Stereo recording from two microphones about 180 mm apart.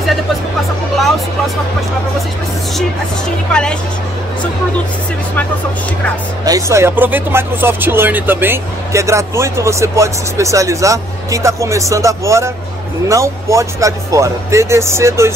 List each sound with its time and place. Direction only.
6.4 s speech: 20° right (ahead or behind)